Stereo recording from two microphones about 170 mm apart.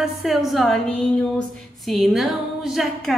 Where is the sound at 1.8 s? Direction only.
Centre (ahead or behind).